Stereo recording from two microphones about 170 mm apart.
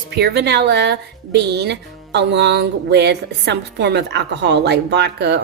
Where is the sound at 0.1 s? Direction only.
75° right (ahead or behind).